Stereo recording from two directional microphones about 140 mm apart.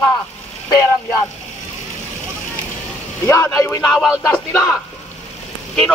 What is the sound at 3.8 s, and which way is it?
Speech, centre (ahead or behind).